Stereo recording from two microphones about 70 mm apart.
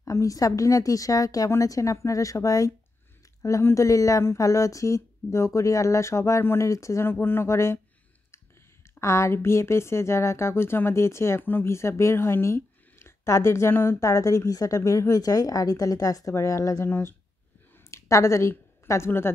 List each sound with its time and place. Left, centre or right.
0.0 s a woman's voice: left
3.7 s speech: left
6.4 s speech: left
6.7 s speech: left
7.1 s speech: left
9.0 s speech: left
17.9 s a woman's voice: left